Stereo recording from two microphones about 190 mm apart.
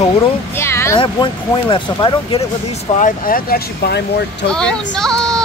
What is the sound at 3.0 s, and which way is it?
Speech, 50° left (ahead or behind).